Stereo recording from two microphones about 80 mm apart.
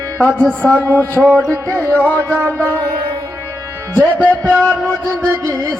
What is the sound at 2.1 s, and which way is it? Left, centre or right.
Music, right.